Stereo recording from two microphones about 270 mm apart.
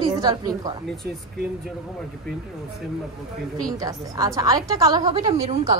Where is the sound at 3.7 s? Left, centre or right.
Centre.